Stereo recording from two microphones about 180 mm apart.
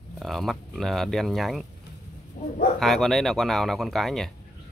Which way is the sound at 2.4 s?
55° left (ahead or behind).